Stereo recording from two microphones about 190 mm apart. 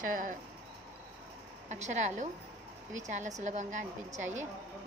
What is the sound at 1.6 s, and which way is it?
A woman's voice, 35° right (ahead or behind).